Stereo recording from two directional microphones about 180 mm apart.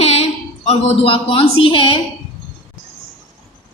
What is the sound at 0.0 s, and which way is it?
A woman's voice, 35° left (ahead or behind).